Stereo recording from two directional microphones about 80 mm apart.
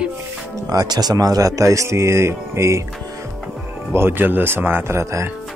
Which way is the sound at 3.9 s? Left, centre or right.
Right.